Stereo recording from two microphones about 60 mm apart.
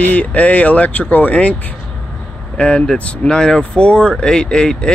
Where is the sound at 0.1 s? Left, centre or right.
Left.